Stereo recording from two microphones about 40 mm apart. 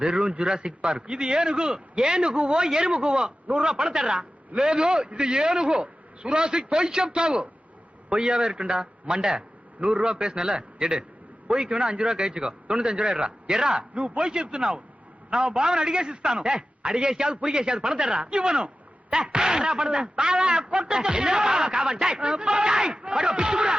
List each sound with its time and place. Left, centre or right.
0.0 s a man's voice: right